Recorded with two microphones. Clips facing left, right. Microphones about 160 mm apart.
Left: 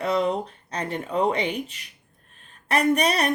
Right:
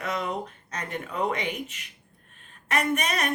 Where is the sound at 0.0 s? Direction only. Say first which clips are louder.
Left 7 dB; 30° left (ahead or behind).